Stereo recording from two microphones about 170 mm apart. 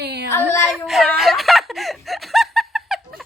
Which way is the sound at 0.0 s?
75° right (ahead or behind).